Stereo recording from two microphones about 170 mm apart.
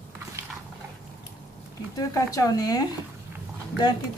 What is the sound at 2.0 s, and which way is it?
Speech, 20° left (ahead or behind).